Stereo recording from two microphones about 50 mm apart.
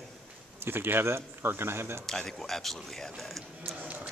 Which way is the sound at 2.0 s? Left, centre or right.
Centre.